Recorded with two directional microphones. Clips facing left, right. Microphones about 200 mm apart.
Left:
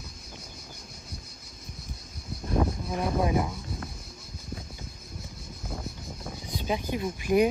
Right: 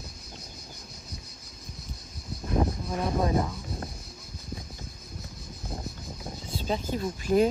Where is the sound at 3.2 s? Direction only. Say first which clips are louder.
Even; 10° left (ahead or behind).